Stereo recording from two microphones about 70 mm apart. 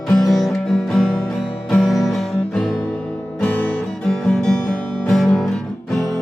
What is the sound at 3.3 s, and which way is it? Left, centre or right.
Music, left.